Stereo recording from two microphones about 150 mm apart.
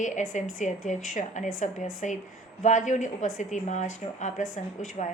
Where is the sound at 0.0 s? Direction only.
55° left (ahead or behind).